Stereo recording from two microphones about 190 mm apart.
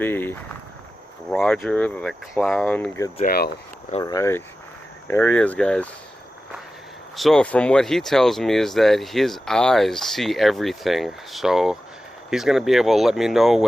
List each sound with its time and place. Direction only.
0.0 s speech: 10° left (ahead or behind)
3.2 s speech: 55° left (ahead or behind)
4.0 s speech: 15° left (ahead or behind)
7.2 s speech: 5° left (ahead or behind)